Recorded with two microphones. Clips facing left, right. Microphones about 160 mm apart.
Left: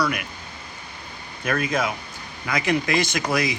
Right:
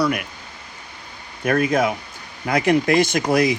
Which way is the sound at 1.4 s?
45° right (ahead or behind).